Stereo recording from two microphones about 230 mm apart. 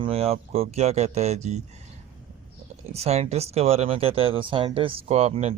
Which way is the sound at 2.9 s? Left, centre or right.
Right.